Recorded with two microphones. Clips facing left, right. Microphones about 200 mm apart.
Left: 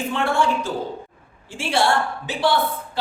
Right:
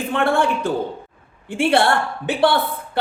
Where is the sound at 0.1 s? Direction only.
60° right (ahead or behind).